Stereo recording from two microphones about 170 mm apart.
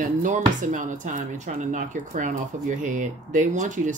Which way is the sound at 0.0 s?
50° right (ahead or behind).